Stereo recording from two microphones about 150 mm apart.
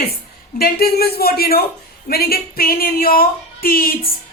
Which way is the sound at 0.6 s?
90° left.